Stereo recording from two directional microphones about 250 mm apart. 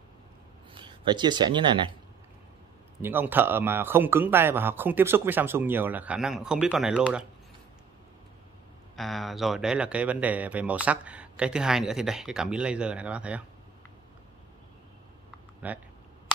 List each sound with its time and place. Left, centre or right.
0.7 s speech: centre
3.0 s speech: centre
8.9 s speech: centre
15.6 s speech: centre